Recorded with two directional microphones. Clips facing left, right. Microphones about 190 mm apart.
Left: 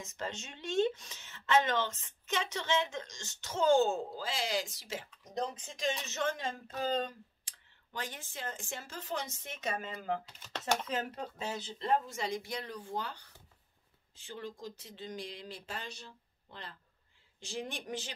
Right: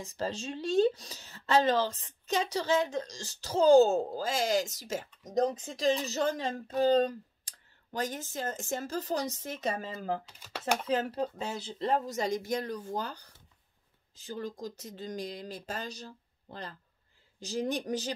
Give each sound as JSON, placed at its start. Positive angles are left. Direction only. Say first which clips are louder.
{"t": 0.0, "sound": "speech", "louder": "right 6 dB", "side_deg": -35}
{"t": 10.2, "sound": "speech", "louder": "right 1 dB", "side_deg": -5}
{"t": 10.9, "sound": "speech", "louder": "right 7 dB", "side_deg": -35}